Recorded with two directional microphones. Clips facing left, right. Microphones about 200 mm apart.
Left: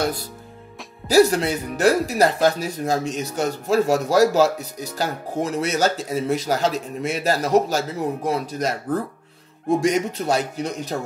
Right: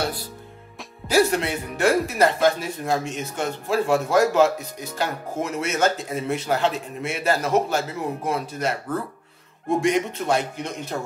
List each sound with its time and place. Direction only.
1.0 s speech: 35° left (ahead or behind)